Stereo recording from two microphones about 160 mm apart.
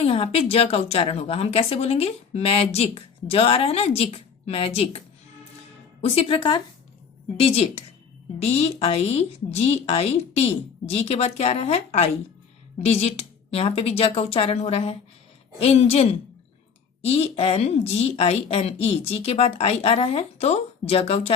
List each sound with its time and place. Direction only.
0.0 s a woman's voice: 40° left (ahead or behind)